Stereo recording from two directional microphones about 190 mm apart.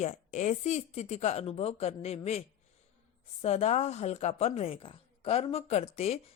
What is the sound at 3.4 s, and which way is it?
Speech, 35° left (ahead or behind).